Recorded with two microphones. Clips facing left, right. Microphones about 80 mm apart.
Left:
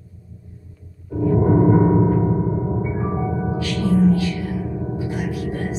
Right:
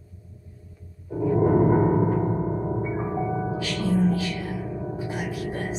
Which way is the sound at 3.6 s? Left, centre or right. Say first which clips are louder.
Left 7 dB; centre.